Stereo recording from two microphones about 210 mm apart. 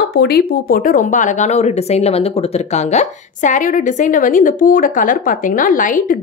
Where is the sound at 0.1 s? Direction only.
50° left (ahead or behind).